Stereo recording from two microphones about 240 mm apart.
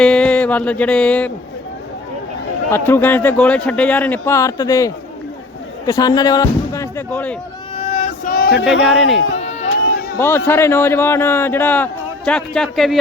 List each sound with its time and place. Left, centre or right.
0.0 s a sound: centre
2.6 s a man's voice: centre
7.8 s male singing: left
8.4 s speech: left
8.8 s speech: centre
9.4 s run: left
9.6 s a sound: left
10.2 s a man's voice: centre